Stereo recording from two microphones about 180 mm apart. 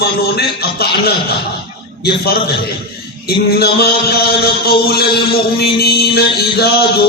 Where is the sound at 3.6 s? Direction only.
60° left (ahead or behind).